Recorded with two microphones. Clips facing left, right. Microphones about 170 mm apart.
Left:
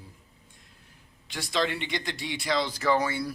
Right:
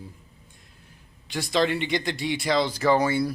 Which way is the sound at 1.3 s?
40° right (ahead or behind).